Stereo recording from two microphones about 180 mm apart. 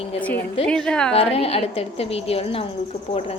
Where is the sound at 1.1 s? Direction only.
35° left (ahead or behind).